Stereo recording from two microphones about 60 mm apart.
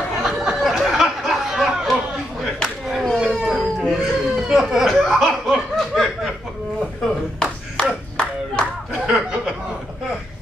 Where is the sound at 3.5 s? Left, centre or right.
Centre.